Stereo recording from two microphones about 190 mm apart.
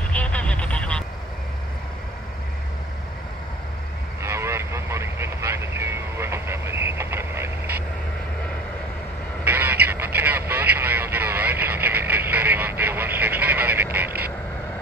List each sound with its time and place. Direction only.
0.1 s vehicle: 5° left (ahead or behind)
4.2 s vehicle: 15° right (ahead or behind)
9.4 s a sound: 10° right (ahead or behind)